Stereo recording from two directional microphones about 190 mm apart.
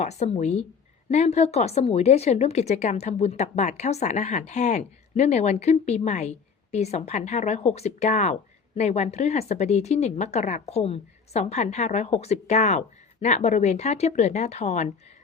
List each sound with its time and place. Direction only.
0.0 s a woman's voice: 35° left (ahead or behind)